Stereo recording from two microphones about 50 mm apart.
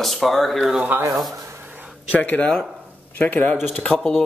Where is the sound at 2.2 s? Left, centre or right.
Left.